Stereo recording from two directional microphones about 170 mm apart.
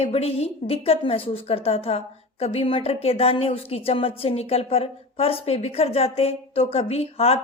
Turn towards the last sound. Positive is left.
turn(degrees=35)  # may be behind; listen again after turning